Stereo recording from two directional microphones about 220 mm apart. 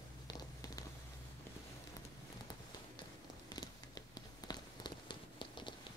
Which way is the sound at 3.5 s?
20° left (ahead or behind).